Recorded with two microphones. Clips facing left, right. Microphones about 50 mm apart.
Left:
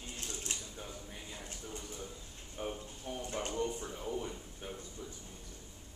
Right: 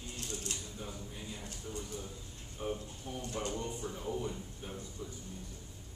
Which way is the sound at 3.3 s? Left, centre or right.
Left.